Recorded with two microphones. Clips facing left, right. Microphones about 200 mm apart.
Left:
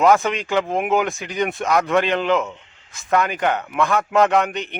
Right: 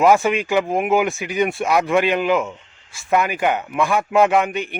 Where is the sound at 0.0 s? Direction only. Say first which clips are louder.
Right 1 dB; 15° right (ahead or behind).